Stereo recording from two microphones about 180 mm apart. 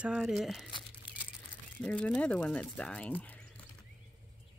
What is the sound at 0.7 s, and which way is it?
Crumpling, 25° left (ahead or behind).